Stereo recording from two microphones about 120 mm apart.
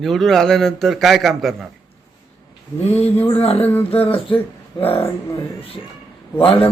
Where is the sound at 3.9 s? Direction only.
50° left (ahead or behind).